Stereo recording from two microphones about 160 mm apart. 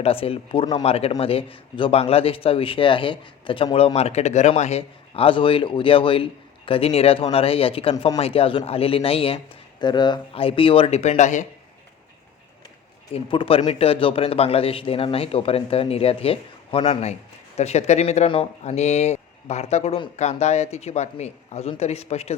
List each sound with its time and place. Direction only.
0.0 s a man's voice: 35° left (ahead or behind)
13.1 s a man's voice: 35° left (ahead or behind)